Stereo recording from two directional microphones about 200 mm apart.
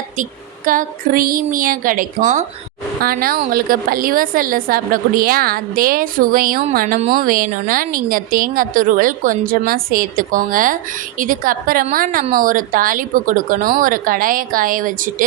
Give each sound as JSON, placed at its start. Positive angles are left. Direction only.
{"t": 0.2, "sound": "a woman's voice", "side_deg": -40}